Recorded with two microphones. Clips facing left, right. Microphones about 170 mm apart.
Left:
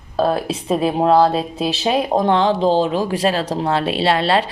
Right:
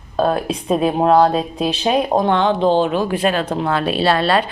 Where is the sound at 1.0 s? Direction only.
30° left (ahead or behind).